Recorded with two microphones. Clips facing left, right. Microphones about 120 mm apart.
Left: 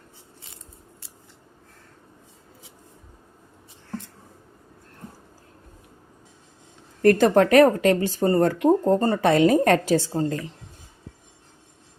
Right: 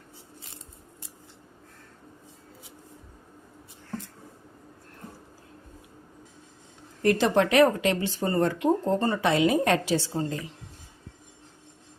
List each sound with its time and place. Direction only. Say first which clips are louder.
7.0 s speech: left 6 dB; 50° left (ahead or behind)